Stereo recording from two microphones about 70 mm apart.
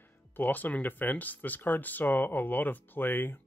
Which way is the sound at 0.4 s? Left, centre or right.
Left.